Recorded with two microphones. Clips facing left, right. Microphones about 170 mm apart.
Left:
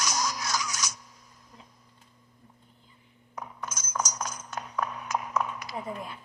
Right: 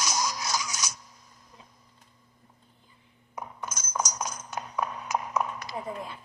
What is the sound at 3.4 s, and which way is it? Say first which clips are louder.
Chink: right 1 dB; 10° right (ahead or behind).